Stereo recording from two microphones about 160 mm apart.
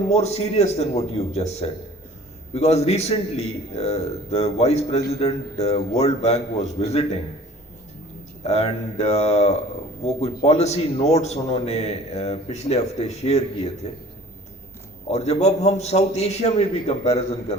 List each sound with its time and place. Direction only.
0.1 s a man's voice: 40° left (ahead or behind)
8.4 s a man's voice: 40° left (ahead or behind)
15.1 s a man's voice: 40° left (ahead or behind)